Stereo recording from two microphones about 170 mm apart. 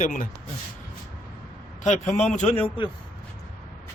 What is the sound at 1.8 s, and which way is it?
Speech, 45° left (ahead or behind).